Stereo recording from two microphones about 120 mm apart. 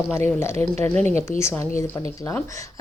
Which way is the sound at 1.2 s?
20° left (ahead or behind).